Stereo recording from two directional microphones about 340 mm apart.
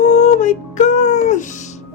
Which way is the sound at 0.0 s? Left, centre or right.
Centre.